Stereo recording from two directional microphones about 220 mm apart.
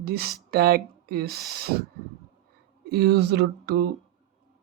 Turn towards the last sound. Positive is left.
turn(degrees=-45)  # may be behind; listen again after turning